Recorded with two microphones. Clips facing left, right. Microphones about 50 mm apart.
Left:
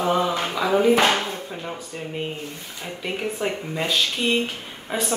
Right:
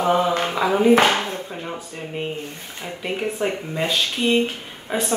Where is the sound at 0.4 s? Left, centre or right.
Right.